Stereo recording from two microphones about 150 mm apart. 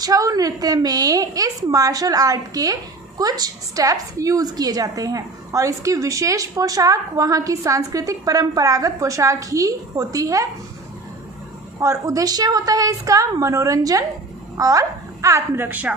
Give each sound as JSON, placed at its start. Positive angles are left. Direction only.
{"t": 0.0, "sound": "a woman's voice", "side_deg": -25}
{"t": 11.8, "sound": "a woman's voice", "side_deg": -20}